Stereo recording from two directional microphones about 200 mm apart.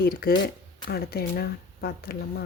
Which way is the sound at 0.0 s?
50° left (ahead or behind).